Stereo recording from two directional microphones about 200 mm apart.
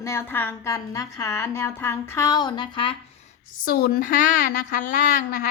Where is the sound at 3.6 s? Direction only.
50° left (ahead or behind).